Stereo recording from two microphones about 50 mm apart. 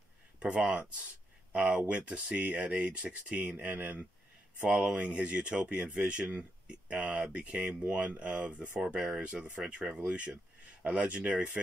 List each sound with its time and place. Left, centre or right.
0.4 s speech: centre
1.5 s speech: right